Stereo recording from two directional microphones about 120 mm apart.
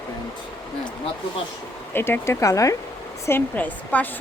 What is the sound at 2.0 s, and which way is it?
Speech, 20° left (ahead or behind).